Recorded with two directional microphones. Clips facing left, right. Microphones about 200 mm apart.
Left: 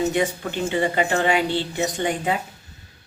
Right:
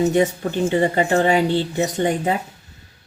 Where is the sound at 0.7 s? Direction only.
35° right (ahead or behind).